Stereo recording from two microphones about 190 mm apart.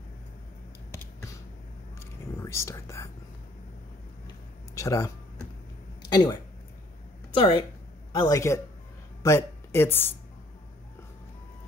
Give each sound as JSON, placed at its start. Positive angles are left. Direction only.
{"t": 2.0, "sound": "whispering", "side_deg": 15}
{"t": 4.7, "sound": "speech", "side_deg": 15}
{"t": 6.0, "sound": "a sound", "side_deg": 20}
{"t": 7.3, "sound": "a man's voice", "side_deg": 25}